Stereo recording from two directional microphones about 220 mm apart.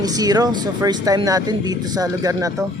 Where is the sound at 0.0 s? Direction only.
15° right (ahead or behind).